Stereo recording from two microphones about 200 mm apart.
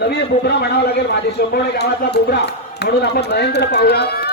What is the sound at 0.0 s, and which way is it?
Speech, 55° left (ahead or behind).